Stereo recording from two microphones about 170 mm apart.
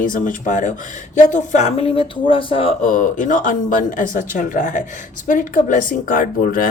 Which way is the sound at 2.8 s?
50° left (ahead or behind).